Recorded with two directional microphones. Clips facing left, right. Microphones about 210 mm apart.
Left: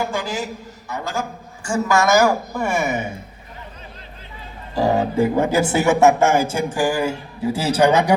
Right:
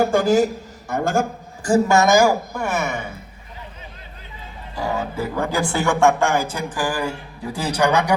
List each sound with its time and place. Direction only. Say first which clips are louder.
0.0 s a woman's voice: right 9 dB; 45° right (ahead or behind)
1.7 s a woman's voice: right 2 dB; 25° right (ahead or behind)
2.5 s speech: left 2 dB; 10° left (ahead or behind)
4.7 s speech: left 7 dB; 35° left (ahead or behind); by 6.6 s 20° left (ahead or behind)
6.7 s speech: left 4 dB; 10° left (ahead or behind)
7.0 s speech: left 5 dB; 25° left (ahead or behind)